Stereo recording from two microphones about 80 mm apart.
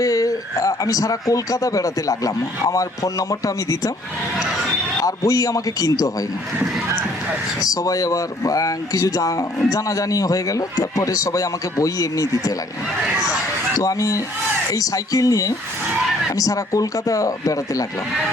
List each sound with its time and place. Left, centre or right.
0.0 s speech: left
5.0 s speech: left
7.6 s speech: left
13.7 s speech: left